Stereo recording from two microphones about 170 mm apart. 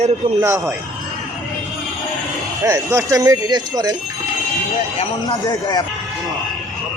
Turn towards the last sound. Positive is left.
turn(degrees=25)  # may be behind; listen again after turning